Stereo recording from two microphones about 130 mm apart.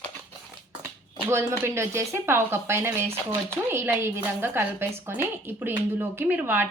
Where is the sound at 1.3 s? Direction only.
20° right (ahead or behind).